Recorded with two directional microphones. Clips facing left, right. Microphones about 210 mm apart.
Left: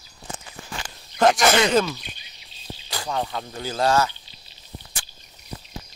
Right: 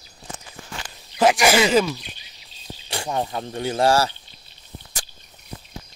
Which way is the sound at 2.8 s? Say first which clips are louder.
Right 2 dB; 25° right (ahead or behind).